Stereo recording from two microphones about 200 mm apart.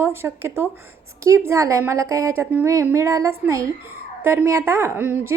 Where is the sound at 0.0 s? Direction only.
10° right (ahead or behind).